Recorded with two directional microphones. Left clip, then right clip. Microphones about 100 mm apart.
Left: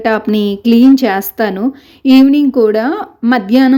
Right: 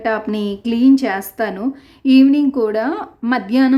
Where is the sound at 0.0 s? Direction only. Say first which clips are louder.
Left 6 dB; 30° left (ahead or behind).